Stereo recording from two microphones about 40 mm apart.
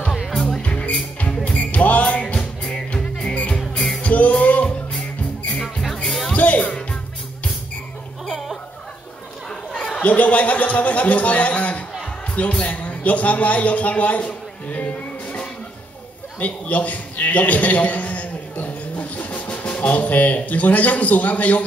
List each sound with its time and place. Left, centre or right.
0.3 s music: centre
1.4 s music: left; by 3.9 s centre
4.0 s music: left
6.0 s music: centre
6.3 s music: left
8.3 s music: centre
10.0 s a man's voice: left
14.7 s music: left
16.3 s a man's voice: left